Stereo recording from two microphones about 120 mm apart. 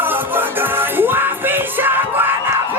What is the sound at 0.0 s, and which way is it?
Music, 15° right (ahead or behind).